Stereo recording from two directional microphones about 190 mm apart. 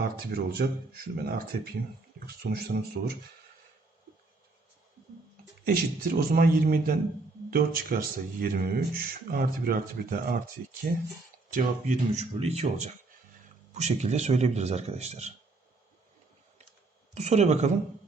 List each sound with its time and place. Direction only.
0.0 s speech: 55° right (ahead or behind)
5.6 s speech: 50° right (ahead or behind)
11.5 s speech: 35° right (ahead or behind)
17.2 s speech: 35° right (ahead or behind)